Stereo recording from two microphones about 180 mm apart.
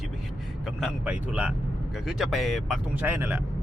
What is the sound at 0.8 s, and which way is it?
Speech, 5° right (ahead or behind).